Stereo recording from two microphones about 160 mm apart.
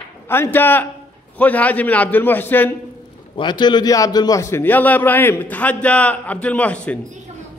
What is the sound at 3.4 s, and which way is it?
A man's voice, 30° left (ahead or behind).